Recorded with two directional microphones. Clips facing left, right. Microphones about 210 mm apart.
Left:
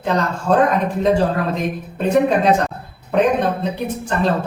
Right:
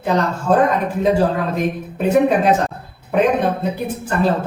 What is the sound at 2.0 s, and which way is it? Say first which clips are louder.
A man's voice: right 1 dB; 5° right (ahead or behind).